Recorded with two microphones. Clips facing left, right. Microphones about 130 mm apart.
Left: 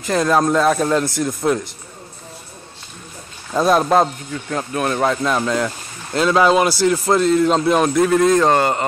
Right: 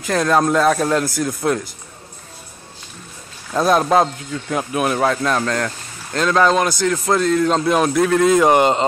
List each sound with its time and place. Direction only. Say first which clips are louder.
0.0 s speech: even; centre (ahead or behind)
3.5 s speech: even; centre (ahead or behind)
5.0 s speech: even; 5° left (ahead or behind)
8.5 s speech: right 2 dB; 20° right (ahead or behind)